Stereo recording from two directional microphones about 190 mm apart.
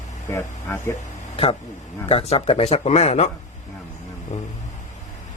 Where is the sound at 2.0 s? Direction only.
30° left (ahead or behind).